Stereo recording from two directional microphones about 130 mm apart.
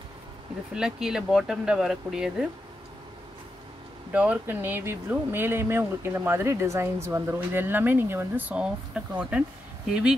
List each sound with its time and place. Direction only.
0.7 s speech: 5° right (ahead or behind)
4.1 s speech: 10° right (ahead or behind)